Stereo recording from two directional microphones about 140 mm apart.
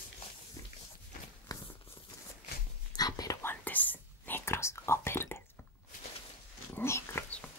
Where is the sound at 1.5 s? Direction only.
25° left (ahead or behind).